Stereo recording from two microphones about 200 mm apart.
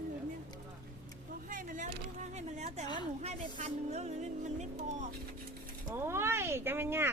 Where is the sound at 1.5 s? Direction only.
40° right (ahead or behind).